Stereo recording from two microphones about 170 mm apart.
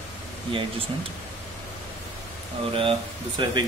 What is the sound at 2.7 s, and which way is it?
Speech, 30° right (ahead or behind).